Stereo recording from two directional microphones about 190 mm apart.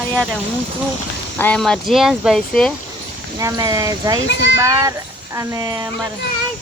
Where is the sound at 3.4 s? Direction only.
20° right (ahead or behind).